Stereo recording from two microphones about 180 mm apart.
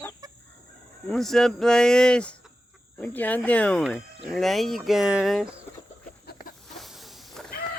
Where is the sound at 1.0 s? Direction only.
Centre (ahead or behind).